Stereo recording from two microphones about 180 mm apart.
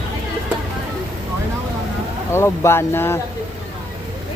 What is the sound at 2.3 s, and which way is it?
Speech, 15° left (ahead or behind).